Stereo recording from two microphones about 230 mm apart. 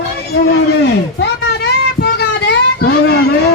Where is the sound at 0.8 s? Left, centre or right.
Left.